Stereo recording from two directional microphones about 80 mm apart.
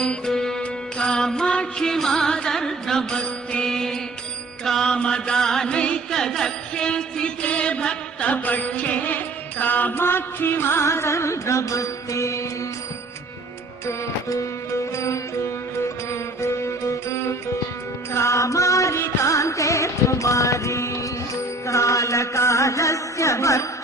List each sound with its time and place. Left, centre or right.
0.0 s music: centre; by 12.5 s left
13.8 s music: left
16.4 s music: left
21.7 s chant: left